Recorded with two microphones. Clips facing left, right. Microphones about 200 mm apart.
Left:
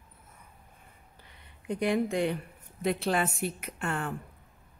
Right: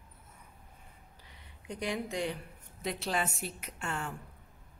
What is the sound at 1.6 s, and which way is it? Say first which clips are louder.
Speech: left 8 dB; 55° left (ahead or behind).